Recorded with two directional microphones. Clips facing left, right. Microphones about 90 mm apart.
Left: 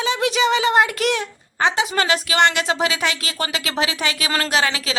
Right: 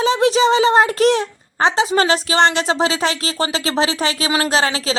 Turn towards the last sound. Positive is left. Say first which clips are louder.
# right 3 dB
turn(degrees=-30)  # may be behind; listen again after turning